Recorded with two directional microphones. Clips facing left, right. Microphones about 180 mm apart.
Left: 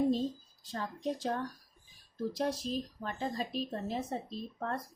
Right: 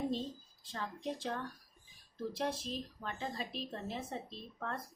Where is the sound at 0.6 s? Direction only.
40° left (ahead or behind).